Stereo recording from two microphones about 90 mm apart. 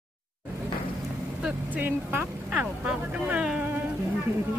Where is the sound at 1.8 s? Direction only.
20° right (ahead or behind).